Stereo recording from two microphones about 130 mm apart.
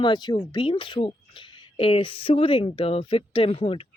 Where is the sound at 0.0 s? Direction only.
35° left (ahead or behind).